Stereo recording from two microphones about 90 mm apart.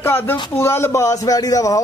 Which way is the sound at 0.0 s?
25° left (ahead or behind).